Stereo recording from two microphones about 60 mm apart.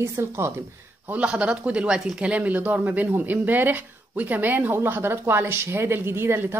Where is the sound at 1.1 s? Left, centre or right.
Right.